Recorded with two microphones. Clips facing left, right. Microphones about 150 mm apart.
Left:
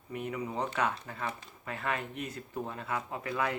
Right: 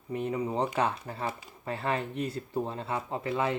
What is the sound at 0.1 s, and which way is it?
Speech, 30° right (ahead or behind).